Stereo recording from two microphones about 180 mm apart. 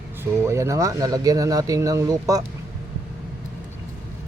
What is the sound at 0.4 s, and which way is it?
Speech, 15° right (ahead or behind).